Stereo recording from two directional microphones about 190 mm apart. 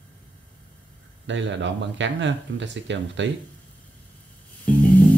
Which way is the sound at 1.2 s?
70° right (ahead or behind).